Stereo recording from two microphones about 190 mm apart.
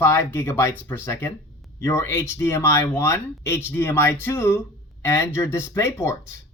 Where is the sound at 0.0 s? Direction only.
10° left (ahead or behind).